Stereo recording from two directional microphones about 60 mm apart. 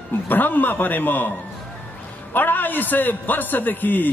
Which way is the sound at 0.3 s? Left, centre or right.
Left.